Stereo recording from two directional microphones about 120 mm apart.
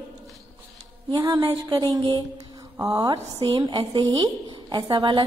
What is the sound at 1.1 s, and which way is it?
A woman's voice, 30° right (ahead or behind).